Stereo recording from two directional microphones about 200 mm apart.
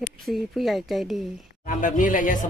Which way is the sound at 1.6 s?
40° left (ahead or behind).